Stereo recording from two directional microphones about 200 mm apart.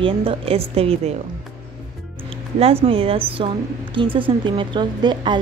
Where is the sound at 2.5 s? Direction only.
30° right (ahead or behind).